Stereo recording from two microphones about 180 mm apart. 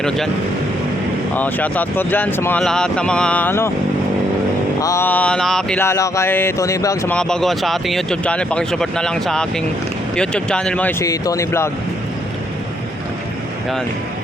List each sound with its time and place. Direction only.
1.4 s speech: 10° left (ahead or behind)
4.8 s speech: 15° left (ahead or behind)
7.1 s speech: 5° left (ahead or behind)
11.0 s speech: 20° left (ahead or behind)